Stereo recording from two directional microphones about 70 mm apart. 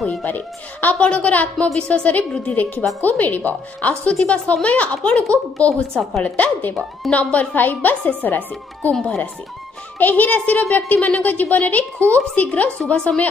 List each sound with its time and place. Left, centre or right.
0.2 s a woman's voice: left
8.9 s speech: centre
9.9 s a woman's voice: left